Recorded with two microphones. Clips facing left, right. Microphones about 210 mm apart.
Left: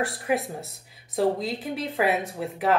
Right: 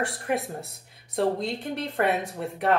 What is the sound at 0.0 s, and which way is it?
A woman's voice, centre (ahead or behind).